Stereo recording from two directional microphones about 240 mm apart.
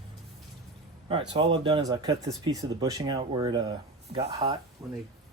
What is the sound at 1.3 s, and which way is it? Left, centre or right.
Speech, right.